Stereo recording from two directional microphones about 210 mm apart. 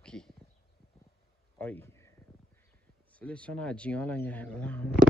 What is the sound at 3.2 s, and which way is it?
Speech, 5° left (ahead or behind).